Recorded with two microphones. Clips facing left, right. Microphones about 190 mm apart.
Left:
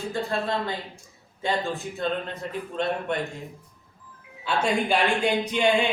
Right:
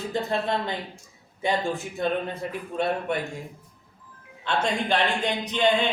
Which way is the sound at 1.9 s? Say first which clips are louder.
Right 3 dB; 10° right (ahead or behind).